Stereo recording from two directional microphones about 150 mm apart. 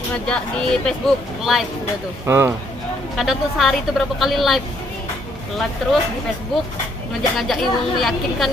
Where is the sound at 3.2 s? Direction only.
Centre (ahead or behind).